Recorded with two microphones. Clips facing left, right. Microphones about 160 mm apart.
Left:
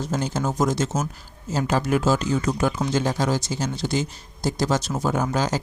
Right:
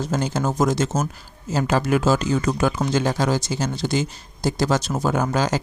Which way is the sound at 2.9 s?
75° right (ahead or behind).